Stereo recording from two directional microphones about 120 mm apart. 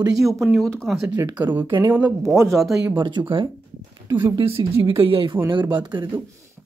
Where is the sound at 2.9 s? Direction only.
40° right (ahead or behind).